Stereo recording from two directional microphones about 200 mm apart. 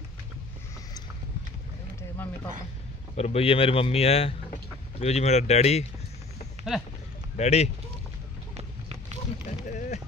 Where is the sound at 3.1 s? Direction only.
30° left (ahead or behind).